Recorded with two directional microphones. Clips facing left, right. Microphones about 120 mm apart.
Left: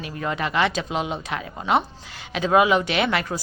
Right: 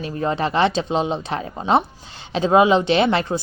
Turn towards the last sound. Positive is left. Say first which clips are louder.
# right 5 dB
turn(degrees=-30)  # may be behind; listen again after turning